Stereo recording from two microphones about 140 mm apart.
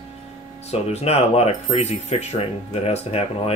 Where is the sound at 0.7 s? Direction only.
50° left (ahead or behind).